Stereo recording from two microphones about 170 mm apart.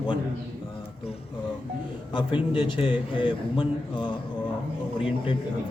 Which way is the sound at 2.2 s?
30° left (ahead or behind).